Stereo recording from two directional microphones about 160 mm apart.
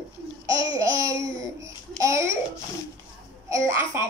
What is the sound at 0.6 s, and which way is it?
Babbling, 20° right (ahead or behind).